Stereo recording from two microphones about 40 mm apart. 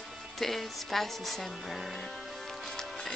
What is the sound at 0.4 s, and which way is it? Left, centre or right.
Speech, centre.